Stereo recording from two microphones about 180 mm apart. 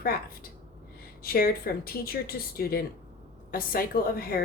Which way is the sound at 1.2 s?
55° left (ahead or behind).